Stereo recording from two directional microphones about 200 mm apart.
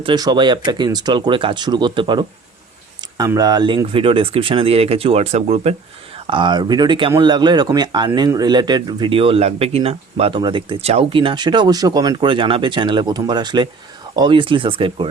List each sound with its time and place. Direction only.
0.0 s speech: 20° right (ahead or behind)